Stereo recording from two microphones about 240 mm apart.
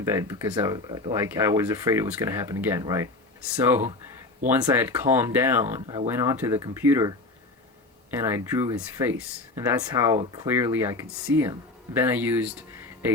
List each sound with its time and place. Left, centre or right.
0.0 s speech: centre
5.8 s speech: right
8.2 s speech: centre